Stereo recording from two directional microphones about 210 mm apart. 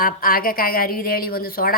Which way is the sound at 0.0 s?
45° left (ahead or behind).